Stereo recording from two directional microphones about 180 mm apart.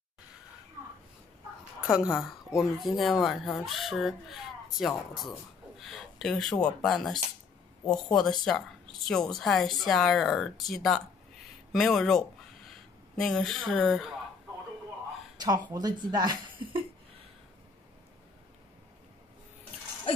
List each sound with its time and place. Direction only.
2.1 s a woman's voice: centre (ahead or behind)
5.8 s a sound: centre (ahead or behind)
6.6 s a woman's voice: 5° left (ahead or behind)
15.4 s a woman's voice: 20° right (ahead or behind)